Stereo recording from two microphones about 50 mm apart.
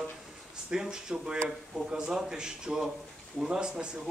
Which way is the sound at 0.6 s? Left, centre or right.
Centre.